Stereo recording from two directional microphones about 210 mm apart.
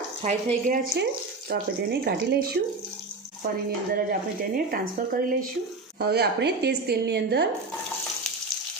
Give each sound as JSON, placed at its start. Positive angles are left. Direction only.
{"t": 0.2, "sound": "speech", "side_deg": -30}
{"t": 1.5, "sound": "speech", "side_deg": -50}
{"t": 3.9, "sound": "speech", "side_deg": -45}